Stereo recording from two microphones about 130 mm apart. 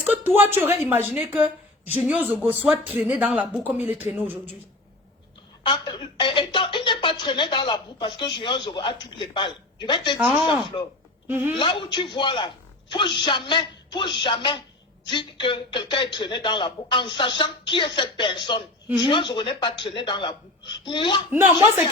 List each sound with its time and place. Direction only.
0.0 s speech: 15° right (ahead or behind)
5.6 s a woman's voice: 35° left (ahead or behind)
11.3 s speech: 15° right (ahead or behind)
11.5 s a woman's voice: 40° left (ahead or behind)